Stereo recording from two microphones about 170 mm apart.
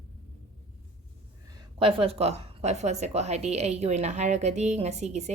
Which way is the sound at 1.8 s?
35° right (ahead or behind).